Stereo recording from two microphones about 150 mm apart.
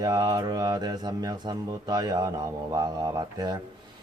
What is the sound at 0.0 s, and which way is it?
Mantra, 25° right (ahead or behind).